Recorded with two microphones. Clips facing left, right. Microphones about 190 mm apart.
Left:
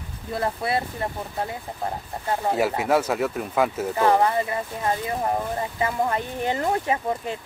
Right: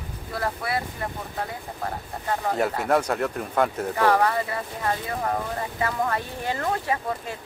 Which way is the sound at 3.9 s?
20° left (ahead or behind).